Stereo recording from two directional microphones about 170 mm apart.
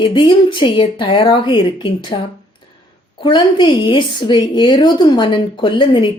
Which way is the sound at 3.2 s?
30° left (ahead or behind).